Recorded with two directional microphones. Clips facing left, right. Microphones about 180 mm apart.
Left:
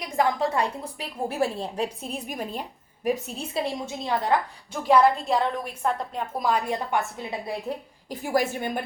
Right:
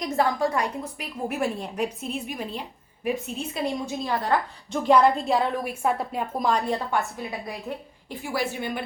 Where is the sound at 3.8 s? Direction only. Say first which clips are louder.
Even; 20° left (ahead or behind).